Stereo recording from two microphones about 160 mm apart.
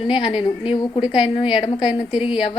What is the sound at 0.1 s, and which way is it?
Speech, 35° left (ahead or behind).